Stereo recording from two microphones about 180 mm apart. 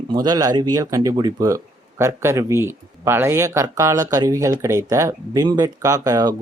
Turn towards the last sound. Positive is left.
turn(degrees=-20)  # may be behind; listen again after turning